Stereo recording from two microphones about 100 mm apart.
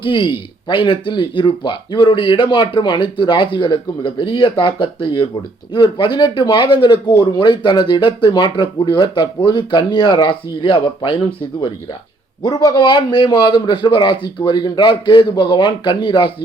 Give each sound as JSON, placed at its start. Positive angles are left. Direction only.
{"t": 0.0, "sound": "speech", "side_deg": 55}
{"t": 12.4, "sound": "speech", "side_deg": 40}